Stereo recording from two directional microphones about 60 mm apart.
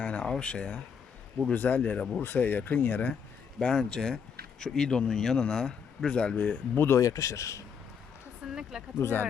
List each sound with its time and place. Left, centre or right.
0.0 s speech: centre
1.5 s speech: left
2.2 s speech: left
3.6 s a man's voice: centre
7.0 s speech: left
8.4 s a sound: centre
9.0 s speech: left